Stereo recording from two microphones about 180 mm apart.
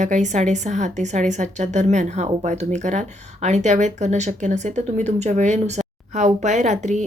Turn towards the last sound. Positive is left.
turn(degrees=-40)  # may be behind; listen again after turning